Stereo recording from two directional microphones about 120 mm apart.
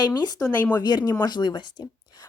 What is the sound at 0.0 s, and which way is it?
A woman's voice, 35° left (ahead or behind).